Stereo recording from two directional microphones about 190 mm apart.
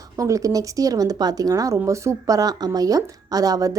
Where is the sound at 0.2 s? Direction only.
15° right (ahead or behind).